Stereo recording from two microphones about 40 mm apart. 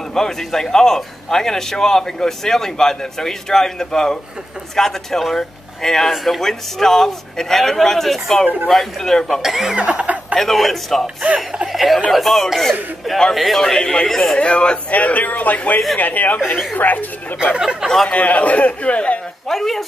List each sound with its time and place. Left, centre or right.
0.1 s a man's voice: centre
9.4 s speech: centre
9.8 s speech: right
10.3 s speech: centre
11.3 s speech: centre
12.1 s speech: centre
13.6 s a man's voice: centre
14.4 s speech: left
14.9 s a man's voice: left
17.6 s speech: centre
17.8 s a man's voice: centre
18.1 s a man's voice: left
19.4 s speech: centre